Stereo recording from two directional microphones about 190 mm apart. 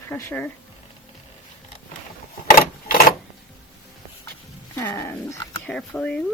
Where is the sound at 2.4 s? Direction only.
45° left (ahead or behind).